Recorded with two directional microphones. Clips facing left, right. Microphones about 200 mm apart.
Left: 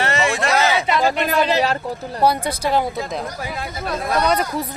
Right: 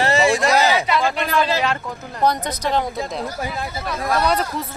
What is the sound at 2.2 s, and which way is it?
Speech, 10° left (ahead or behind).